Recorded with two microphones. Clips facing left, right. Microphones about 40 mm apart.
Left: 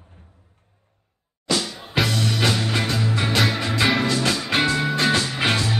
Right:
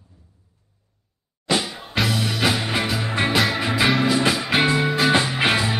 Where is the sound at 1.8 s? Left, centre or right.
Centre.